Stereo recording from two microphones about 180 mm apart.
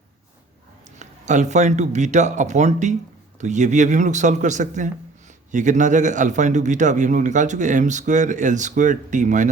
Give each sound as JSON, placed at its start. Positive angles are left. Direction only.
{"t": 0.9, "sound": "a man's voice", "side_deg": -40}